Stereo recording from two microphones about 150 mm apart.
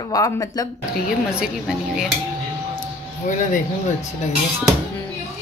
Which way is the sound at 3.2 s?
60° left (ahead or behind).